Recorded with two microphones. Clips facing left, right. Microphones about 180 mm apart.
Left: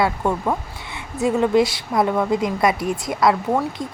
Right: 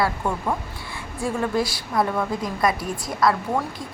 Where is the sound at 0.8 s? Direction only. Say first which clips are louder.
Left 1 dB; 20° left (ahead or behind).